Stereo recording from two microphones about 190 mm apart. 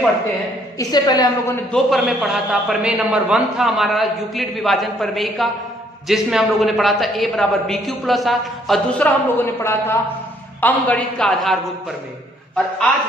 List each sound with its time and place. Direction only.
0.8 s a woman's voice: 20° left (ahead or behind)
1.7 s a man's voice: centre (ahead or behind)